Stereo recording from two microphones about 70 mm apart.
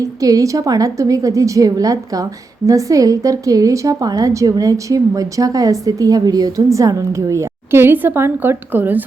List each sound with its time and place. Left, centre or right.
0.0 s a woman's voice: right
6.7 s a woman's voice: right
7.7 s a woman's voice: right